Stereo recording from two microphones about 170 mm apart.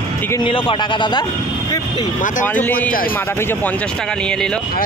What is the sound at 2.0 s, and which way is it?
Speech, 50° left (ahead or behind).